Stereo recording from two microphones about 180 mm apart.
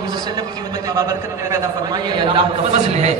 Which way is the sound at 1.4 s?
25° right (ahead or behind).